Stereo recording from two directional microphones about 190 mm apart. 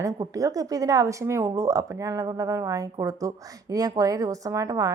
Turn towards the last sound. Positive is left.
turn(degrees=-15)  # may be behind; listen again after turning